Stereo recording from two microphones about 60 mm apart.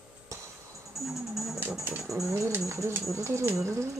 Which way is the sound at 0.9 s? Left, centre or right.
Centre.